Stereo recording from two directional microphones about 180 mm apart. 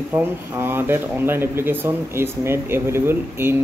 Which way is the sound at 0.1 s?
10° right (ahead or behind).